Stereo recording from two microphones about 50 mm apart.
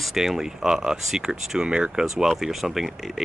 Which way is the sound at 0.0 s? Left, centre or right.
Centre.